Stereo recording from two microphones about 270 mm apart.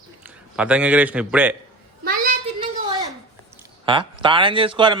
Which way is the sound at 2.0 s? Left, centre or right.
Right.